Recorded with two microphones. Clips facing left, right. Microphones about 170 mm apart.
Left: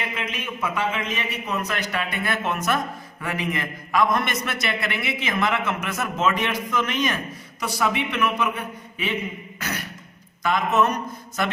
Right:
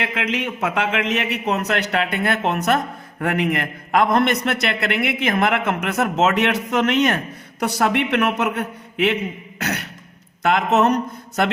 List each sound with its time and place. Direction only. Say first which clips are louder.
0.0 s a man's voice: right 7 dB; 80° right
9.6 s beatboxing: right 6 dB; 70° right (ahead or behind)
10.4 s a man's voice: right 4 dB; 70° right (ahead or behind)